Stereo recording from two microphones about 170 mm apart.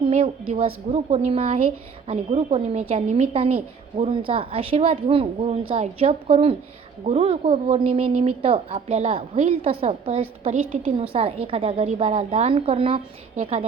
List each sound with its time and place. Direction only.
0.9 s a woman's voice: 40° right (ahead or behind)